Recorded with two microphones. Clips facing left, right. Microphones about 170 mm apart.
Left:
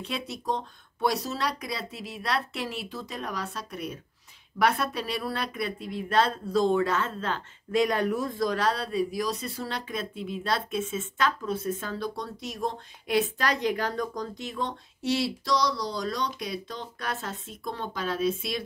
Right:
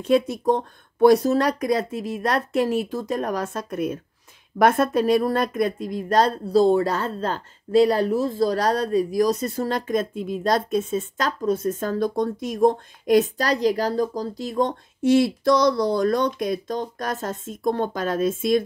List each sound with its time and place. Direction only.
0.0 s speech: 50° right (ahead or behind)